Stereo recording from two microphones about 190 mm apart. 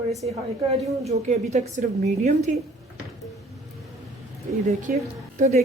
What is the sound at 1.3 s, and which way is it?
Speech, 40° right (ahead or behind).